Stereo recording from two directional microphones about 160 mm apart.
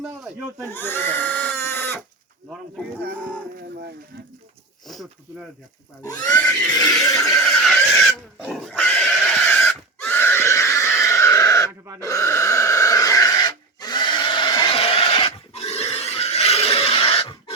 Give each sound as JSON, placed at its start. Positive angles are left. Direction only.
{"t": 0.0, "sound": "speech", "side_deg": -5}
{"t": 0.7, "sound": "pig", "side_deg": 15}
{"t": 4.9, "sound": "speech", "side_deg": 0}
{"t": 6.1, "sound": "neigh", "side_deg": 20}
{"t": 7.4, "sound": "neigh", "side_deg": 0}
{"t": 8.4, "sound": "pig", "side_deg": 0}
{"t": 11.9, "sound": "a sound", "side_deg": 20}